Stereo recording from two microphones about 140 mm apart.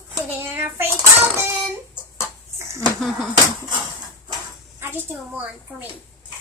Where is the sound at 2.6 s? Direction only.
20° right (ahead or behind).